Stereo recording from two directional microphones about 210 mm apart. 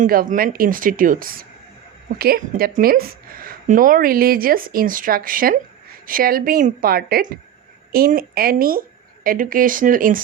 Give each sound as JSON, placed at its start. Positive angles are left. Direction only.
{"t": 0.0, "sound": "a woman's voice", "side_deg": -40}